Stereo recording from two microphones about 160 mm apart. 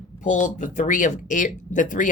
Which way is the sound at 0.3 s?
50° left (ahead or behind).